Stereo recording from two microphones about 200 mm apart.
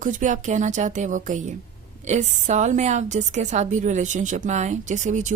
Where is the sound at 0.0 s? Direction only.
40° right (ahead or behind).